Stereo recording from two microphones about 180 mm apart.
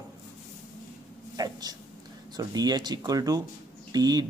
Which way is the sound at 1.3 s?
20° right (ahead or behind).